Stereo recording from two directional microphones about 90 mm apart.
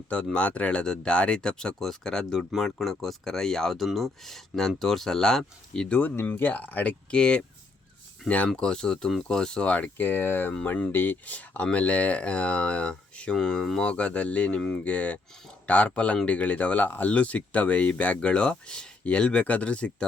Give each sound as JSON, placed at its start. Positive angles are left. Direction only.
{"t": 0.3, "sound": "speech", "side_deg": 15}
{"t": 6.0, "sound": "speech", "side_deg": 20}
{"t": 8.4, "sound": "speech", "side_deg": 10}